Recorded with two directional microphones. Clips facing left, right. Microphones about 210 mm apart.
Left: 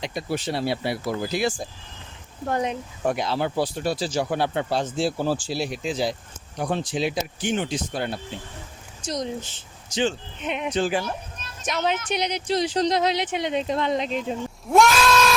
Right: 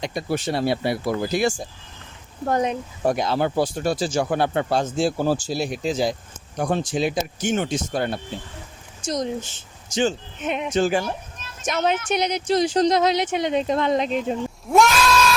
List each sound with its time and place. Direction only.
0.0 s speech: 45° right (ahead or behind)
9.0 s a sound: 45° right (ahead or behind)
9.9 s speech: 45° right (ahead or behind)
14.7 s sheep: centre (ahead or behind)